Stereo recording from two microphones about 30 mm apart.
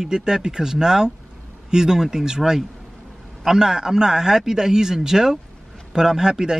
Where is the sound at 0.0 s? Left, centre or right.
Right.